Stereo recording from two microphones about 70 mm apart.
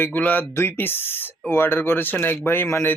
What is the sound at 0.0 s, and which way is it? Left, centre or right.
Speech, left.